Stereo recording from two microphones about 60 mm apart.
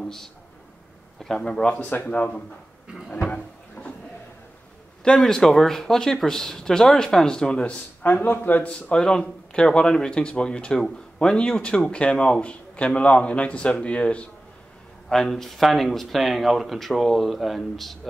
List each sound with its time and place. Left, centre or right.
0.0 s speech: centre
1.9 s a man's voice: left
3.3 s cupboard open or close: centre
5.1 s speech: centre
8.0 s a man's voice: left
15.0 s speech: centre